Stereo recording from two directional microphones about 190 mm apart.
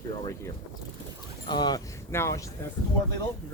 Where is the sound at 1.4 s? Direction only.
20° left (ahead or behind).